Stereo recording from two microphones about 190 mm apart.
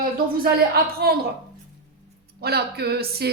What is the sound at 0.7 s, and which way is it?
Speech, 55° right (ahead or behind).